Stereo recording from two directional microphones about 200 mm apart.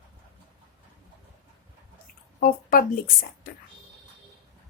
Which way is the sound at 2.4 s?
45° left (ahead or behind).